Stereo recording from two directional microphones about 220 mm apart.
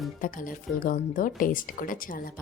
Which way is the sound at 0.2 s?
40° left (ahead or behind).